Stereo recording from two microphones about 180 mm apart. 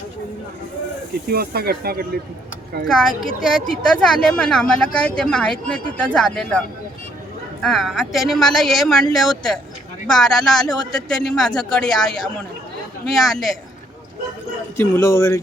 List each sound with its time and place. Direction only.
1.3 s speech: 60° right (ahead or behind)
2.8 s speech: centre (ahead or behind)
7.6 s speech: centre (ahead or behind)
14.8 s speech: 15° left (ahead or behind)